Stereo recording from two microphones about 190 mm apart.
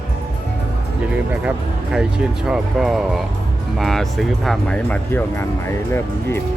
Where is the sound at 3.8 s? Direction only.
Centre (ahead or behind).